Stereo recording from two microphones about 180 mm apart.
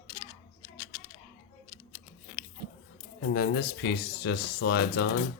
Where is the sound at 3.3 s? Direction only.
65° left (ahead or behind).